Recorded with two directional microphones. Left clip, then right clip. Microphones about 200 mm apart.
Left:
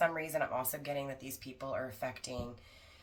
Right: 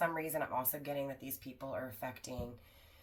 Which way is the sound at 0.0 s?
15° left (ahead or behind).